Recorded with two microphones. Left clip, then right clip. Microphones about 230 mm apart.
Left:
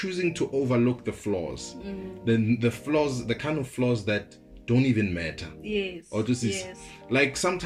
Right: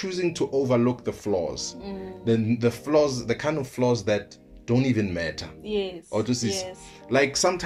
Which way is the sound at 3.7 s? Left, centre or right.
Right.